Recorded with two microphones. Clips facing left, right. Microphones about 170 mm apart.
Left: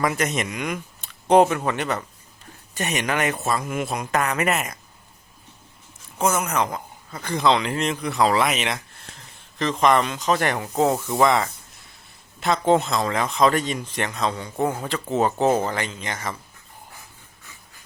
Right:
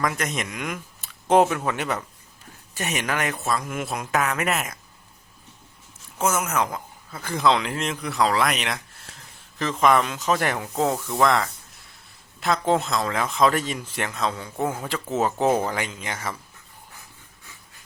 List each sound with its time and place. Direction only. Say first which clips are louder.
0.0 s speech: left 3 dB; 5° left (ahead or behind)
6.2 s speech: left 1 dB; 5° right (ahead or behind)
10.8 s speech: left 4 dB; 15° left (ahead or behind)
11.2 s speech: left 1 dB; centre (ahead or behind)